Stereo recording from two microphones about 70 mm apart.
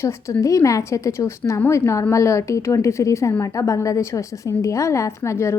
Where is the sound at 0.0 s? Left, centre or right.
Left.